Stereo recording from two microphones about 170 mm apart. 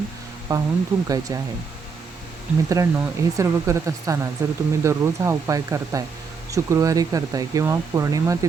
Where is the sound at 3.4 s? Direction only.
15° right (ahead or behind).